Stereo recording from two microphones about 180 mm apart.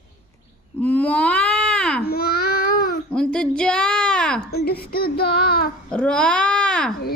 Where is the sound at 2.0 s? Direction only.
60° left (ahead or behind).